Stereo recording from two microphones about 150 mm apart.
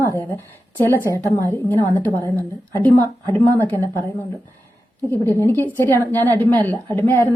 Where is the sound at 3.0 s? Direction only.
30° right (ahead or behind).